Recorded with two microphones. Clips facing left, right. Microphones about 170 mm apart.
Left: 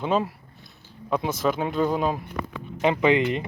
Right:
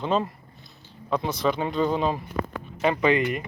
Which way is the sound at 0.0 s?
5° left (ahead or behind).